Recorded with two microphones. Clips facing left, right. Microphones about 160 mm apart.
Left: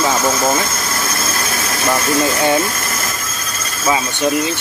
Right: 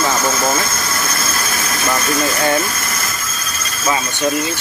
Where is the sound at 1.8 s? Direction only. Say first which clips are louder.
Left 3 dB; 20° left (ahead or behind).